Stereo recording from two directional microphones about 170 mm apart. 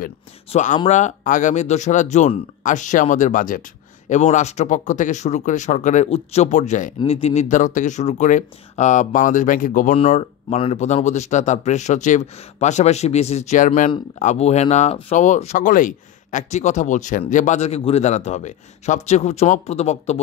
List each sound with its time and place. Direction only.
0.5 s speech: 45° left (ahead or behind)
4.1 s speech: 40° left (ahead or behind)
9.9 s speech: 40° left (ahead or behind)